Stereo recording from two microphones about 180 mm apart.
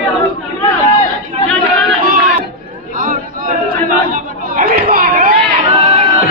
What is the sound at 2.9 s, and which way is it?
A capella, 50° right (ahead or behind).